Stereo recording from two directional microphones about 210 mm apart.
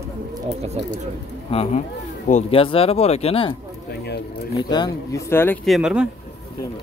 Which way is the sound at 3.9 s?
50° left (ahead or behind).